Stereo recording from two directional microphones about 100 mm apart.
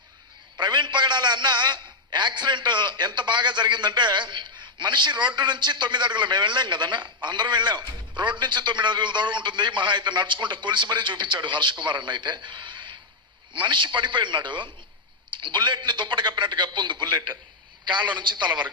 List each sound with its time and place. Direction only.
0.6 s a man's voice: 50° right (ahead or behind)